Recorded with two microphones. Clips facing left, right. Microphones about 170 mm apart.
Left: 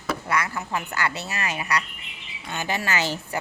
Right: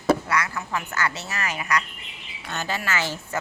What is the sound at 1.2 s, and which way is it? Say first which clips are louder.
A woman's voice: even; 20° left (ahead or behind).